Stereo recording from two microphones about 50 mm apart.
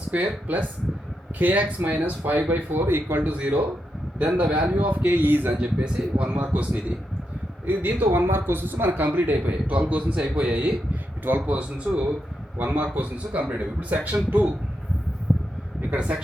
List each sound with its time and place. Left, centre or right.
0.1 s speech: right
3.2 s speech: right
5.5 s speech: right
11.3 s speech: right
15.3 s a sound: centre
15.9 s speech: right